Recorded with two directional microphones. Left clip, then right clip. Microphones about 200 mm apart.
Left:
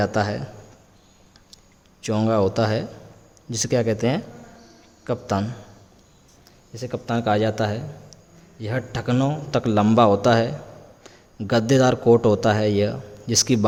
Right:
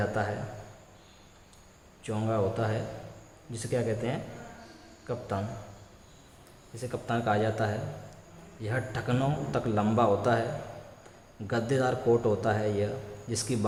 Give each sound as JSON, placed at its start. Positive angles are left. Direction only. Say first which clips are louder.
{"t": 0.0, "sound": "a man's voice", "louder": "left 8 dB", "side_deg": 50}
{"t": 2.0, "sound": "a man's voice", "louder": "left 9 dB", "side_deg": 50}
{"t": 6.7, "sound": "a man's voice", "louder": "left 6 dB", "side_deg": 45}
{"t": 11.4, "sound": "a man's voice", "louder": "left 10 dB", "side_deg": 50}